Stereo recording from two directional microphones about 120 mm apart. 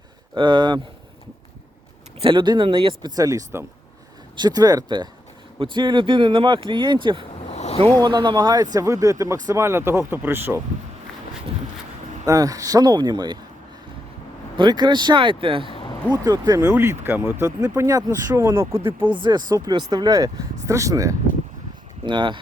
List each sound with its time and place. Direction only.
0.3 s speech: 40° right (ahead or behind)
2.2 s speech: 40° right (ahead or behind)
3.2 s speech: 30° right (ahead or behind)
7.4 s boat: 60° left (ahead or behind)
7.9 s speech: 35° right (ahead or behind); by 10.6 s 20° right (ahead or behind)
12.2 s speech: 30° right (ahead or behind)
14.5 s speech: 40° right (ahead or behind)
15.7 s a sound: 45° left (ahead or behind)
16.1 s speech: 35° right (ahead or behind)
16.8 s speech: 20° right (ahead or behind)
19.1 s speech: 40° right (ahead or behind)
22.0 s speech: 40° right (ahead or behind)